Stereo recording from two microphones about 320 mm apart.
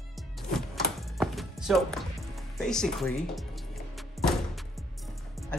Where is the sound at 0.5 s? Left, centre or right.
Centre.